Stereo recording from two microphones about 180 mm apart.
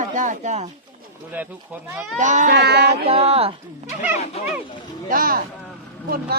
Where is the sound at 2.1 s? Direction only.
45° right (ahead or behind).